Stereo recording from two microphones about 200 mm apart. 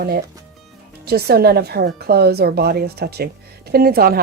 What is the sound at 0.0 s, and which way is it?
Speech, 50° right (ahead or behind).